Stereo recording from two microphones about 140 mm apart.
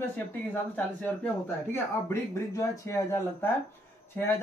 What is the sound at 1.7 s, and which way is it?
Speech, 20° left (ahead or behind).